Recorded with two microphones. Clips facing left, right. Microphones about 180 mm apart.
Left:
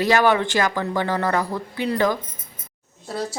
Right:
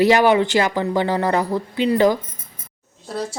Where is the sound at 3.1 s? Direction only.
Centre (ahead or behind).